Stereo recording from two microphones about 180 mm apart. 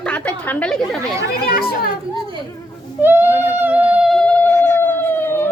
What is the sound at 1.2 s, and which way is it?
Speech, 55° left (ahead or behind).